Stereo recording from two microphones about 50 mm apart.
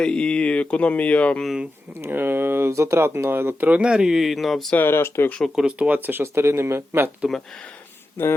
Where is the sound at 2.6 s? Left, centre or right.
Right.